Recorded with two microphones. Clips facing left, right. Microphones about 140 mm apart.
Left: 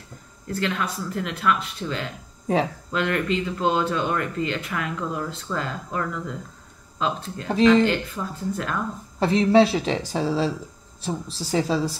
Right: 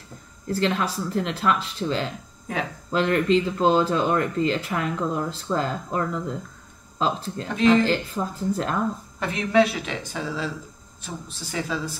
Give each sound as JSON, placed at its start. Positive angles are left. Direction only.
{"t": 0.5, "sound": "speech", "side_deg": -30}
{"t": 9.2, "sound": "a woman's voice", "side_deg": 30}